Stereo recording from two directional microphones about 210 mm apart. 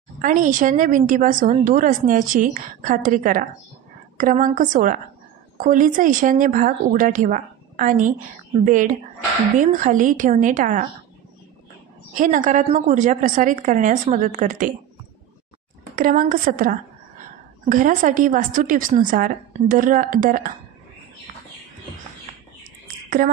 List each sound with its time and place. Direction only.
0.2 s a woman's voice: 40° right (ahead or behind)
12.1 s a woman's voice: 40° right (ahead or behind)
16.0 s a woman's voice: 40° right (ahead or behind)
23.0 s a sound: 40° right (ahead or behind)